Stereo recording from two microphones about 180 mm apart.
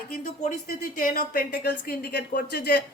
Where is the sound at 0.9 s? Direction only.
55° left (ahead or behind).